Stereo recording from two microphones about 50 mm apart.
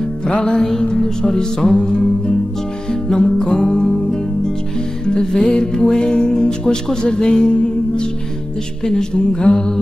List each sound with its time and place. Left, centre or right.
0.3 s music: centre